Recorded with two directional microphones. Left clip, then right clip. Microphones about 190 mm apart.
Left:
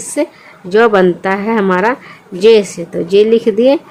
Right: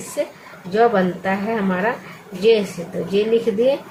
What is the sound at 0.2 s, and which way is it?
Speech, 55° left (ahead or behind).